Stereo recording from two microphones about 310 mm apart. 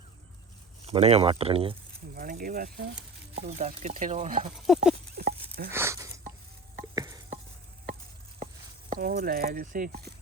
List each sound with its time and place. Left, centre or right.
0.9 s speech: centre
2.1 s speech: right
4.5 s speech: centre
5.1 s a sound: right
5.7 s a sound: centre
9.0 s speech: right